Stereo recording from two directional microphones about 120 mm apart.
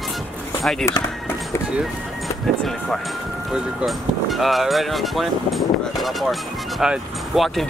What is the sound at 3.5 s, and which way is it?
Speech, centre (ahead or behind).